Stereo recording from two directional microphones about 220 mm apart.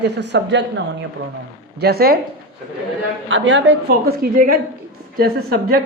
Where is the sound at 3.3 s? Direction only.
55° right (ahead or behind).